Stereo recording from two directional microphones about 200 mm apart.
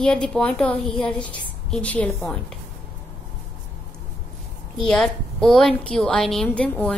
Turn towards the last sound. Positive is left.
turn(degrees=5)  # may be behind; listen again after turning